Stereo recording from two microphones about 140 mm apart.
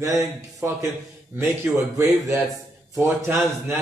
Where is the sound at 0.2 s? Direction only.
20° right (ahead or behind).